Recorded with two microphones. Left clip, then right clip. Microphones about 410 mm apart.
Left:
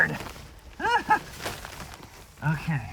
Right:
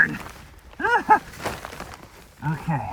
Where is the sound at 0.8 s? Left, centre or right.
Centre.